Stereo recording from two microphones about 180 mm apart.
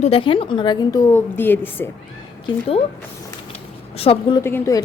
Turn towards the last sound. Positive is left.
turn(degrees=15)  # may be behind; listen again after turning